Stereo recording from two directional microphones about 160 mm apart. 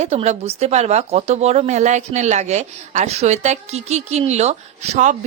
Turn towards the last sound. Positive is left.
turn(degrees=-45)  # may be behind; listen again after turning